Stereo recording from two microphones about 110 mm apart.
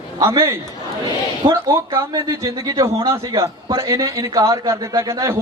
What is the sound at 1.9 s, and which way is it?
A man's voice, 25° right (ahead or behind).